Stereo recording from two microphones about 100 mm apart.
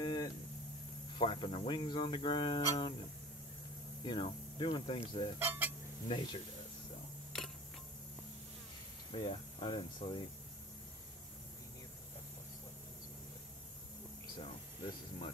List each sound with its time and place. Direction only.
0.0 s a sound: 50° left (ahead or behind)
1.1 s speech: 60° left (ahead or behind)
4.0 s speech: 55° left (ahead or behind)
5.4 s speech: 20° right (ahead or behind)
6.0 s speech: 55° left (ahead or behind)
9.1 s speech: 60° left (ahead or behind)